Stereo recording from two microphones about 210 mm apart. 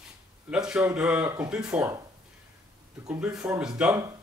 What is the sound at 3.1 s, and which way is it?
Speech, 5° right (ahead or behind).